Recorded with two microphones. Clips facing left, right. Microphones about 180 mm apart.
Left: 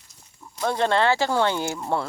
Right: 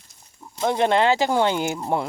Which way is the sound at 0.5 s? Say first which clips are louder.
Right 3 dB; 20° right (ahead or behind).